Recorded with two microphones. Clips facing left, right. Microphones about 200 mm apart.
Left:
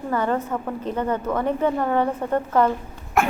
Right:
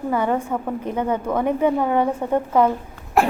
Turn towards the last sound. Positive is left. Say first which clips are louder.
# right 3 dB
turn(degrees=-35)  # may be behind; listen again after turning